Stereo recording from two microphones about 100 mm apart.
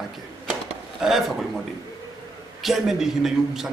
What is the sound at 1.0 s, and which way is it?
Speech, 5° right (ahead or behind).